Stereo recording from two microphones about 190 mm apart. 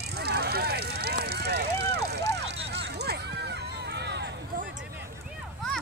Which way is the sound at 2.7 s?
60° right (ahead or behind).